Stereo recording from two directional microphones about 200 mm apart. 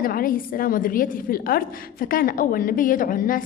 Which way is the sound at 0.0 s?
45° left (ahead or behind).